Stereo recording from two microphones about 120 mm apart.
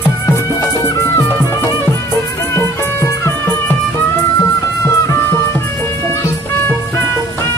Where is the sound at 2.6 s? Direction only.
20° left (ahead or behind).